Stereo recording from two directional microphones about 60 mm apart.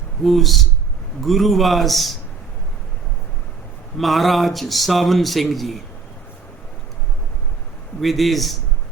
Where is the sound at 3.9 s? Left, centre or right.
Centre.